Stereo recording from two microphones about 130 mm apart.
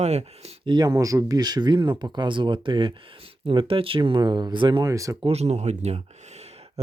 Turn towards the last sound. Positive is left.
turn(degrees=-55)  # may be behind; listen again after turning